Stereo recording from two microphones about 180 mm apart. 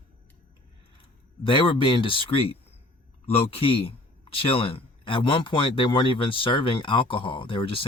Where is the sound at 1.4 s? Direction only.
30° left (ahead or behind).